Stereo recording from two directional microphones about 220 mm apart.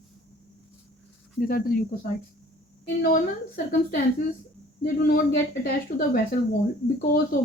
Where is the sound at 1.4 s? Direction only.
45° left (ahead or behind).